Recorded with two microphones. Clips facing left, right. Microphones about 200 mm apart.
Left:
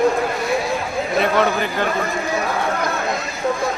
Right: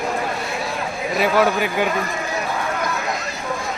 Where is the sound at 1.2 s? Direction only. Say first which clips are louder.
Right 1 dB; 5° right (ahead or behind).